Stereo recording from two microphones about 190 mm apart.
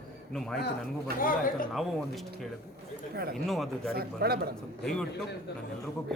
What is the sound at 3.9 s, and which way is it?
Speech, 55° right (ahead or behind).